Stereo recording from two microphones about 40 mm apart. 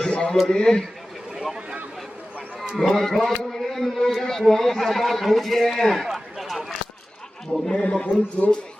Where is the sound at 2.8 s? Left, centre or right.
Centre.